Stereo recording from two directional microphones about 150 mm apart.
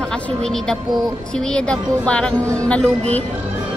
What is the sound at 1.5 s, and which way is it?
A woman's voice, 5° left (ahead or behind).